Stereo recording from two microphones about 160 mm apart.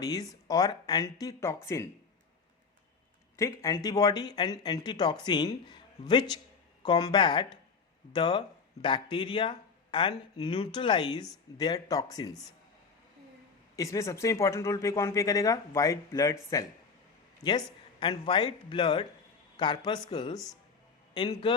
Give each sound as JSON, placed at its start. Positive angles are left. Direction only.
{"t": 0.0, "sound": "speech", "side_deg": 20}
{"t": 3.3, "sound": "speech", "side_deg": 20}
{"t": 13.7, "sound": "speech", "side_deg": 20}
{"t": 18.0, "sound": "a man's voice", "side_deg": 30}